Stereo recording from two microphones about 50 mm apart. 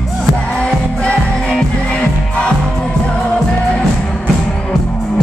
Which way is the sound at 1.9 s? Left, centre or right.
Centre.